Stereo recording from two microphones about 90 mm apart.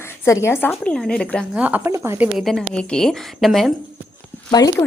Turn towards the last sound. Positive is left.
turn(degrees=40)  # may be behind; listen again after turning